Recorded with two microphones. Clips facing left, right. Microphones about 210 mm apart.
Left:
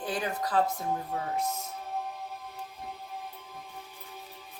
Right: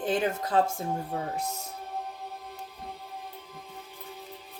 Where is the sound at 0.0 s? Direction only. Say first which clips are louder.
Right 5 dB; 25° right (ahead or behind).